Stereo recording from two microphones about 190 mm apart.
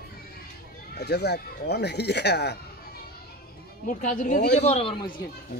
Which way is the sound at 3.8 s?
45° left (ahead or behind).